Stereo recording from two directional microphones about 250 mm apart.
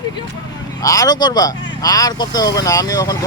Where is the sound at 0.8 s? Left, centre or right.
Centre.